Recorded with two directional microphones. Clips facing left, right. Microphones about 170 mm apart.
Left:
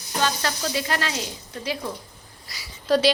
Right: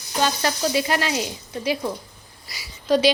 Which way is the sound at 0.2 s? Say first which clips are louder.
Right 3 dB; 15° right (ahead or behind).